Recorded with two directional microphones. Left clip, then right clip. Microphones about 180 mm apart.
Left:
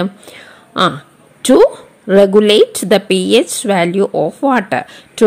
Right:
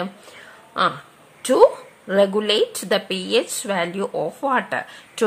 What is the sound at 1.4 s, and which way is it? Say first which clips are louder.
A woman's voice: left 5 dB; 30° left (ahead or behind).